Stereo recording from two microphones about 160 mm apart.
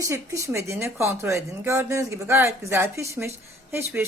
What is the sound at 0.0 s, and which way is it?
A woman's voice, 20° right (ahead or behind).